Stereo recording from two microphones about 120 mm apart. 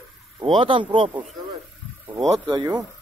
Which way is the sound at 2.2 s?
35° right (ahead or behind).